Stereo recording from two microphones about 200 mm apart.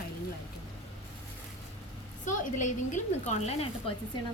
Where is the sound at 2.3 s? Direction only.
40° left (ahead or behind).